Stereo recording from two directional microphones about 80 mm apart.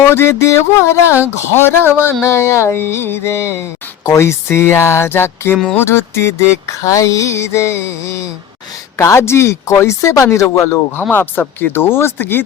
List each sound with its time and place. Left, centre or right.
0.0 s music: left
11.1 s speech: left